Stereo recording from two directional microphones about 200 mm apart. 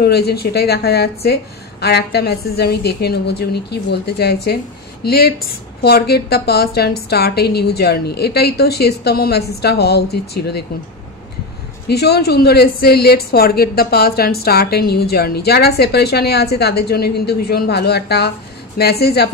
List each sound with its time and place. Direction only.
0.0 s a woman's voice: 55° left (ahead or behind)
11.9 s a woman's voice: 55° left (ahead or behind)